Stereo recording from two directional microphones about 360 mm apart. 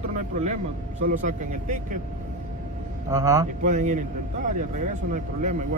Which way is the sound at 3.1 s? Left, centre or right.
Centre.